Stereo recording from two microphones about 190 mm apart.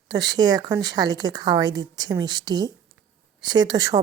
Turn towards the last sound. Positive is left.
turn(degrees=-20)  # may be behind; listen again after turning